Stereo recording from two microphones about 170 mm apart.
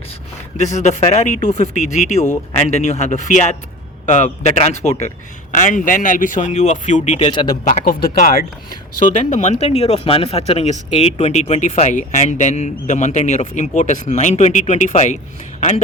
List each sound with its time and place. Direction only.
0.6 s speech: 45° left (ahead or behind)
7.3 s speech: 25° left (ahead or behind)
7.9 s speech: 65° left (ahead or behind)
9.0 s speech: 45° left (ahead or behind)